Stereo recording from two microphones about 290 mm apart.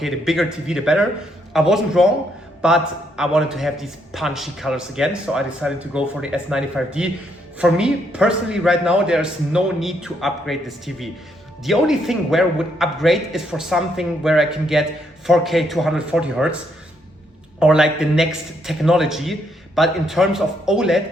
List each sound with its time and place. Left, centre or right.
0.0 s a man's voice: centre
17.6 s a man's voice: centre